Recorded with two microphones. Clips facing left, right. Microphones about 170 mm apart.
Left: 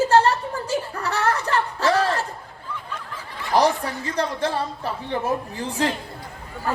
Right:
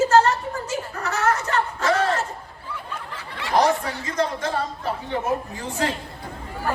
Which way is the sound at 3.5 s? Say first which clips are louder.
Even; 35° left (ahead or behind).